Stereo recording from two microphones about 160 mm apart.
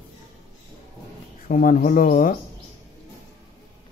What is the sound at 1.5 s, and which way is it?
Speech, 55° left (ahead or behind).